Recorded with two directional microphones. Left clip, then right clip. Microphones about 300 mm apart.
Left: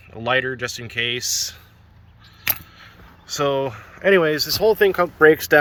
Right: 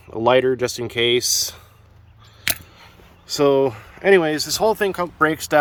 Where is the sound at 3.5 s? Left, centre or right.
Centre.